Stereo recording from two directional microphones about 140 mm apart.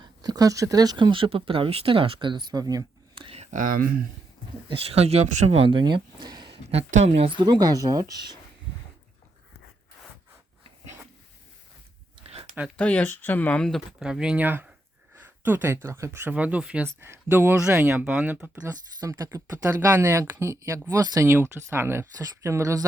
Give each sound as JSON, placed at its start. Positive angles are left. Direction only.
{"t": 0.0, "sound": "speech", "side_deg": -30}
{"t": 3.2, "sound": "speech", "side_deg": -50}
{"t": 4.7, "sound": "speech", "side_deg": -45}
{"t": 6.7, "sound": "speech", "side_deg": -45}
{"t": 12.7, "sound": "speech", "side_deg": 10}
{"t": 18.6, "sound": "speech", "side_deg": -25}